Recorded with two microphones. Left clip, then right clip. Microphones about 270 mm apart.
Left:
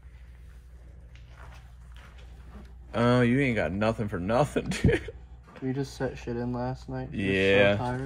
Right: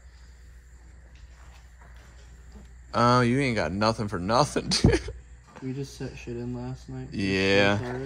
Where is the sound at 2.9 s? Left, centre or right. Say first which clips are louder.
Right 3 dB; right.